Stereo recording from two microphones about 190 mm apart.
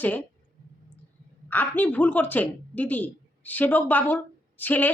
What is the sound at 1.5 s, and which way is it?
A woman's voice, 10° left (ahead or behind).